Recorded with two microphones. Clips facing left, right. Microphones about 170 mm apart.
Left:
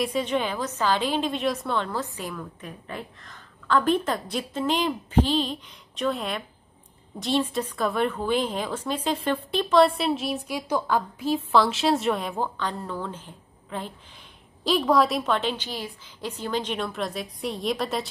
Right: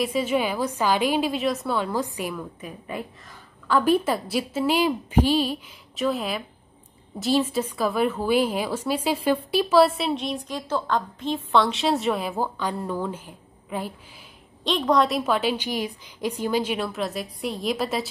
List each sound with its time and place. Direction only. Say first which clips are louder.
0.0 s a woman's voice: right 2 dB; 5° right (ahead or behind)
14.6 s a woman's voice: even; 5° left (ahead or behind)